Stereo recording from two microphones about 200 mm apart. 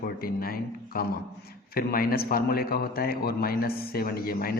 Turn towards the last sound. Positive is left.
turn(degrees=50)  # may be behind; listen again after turning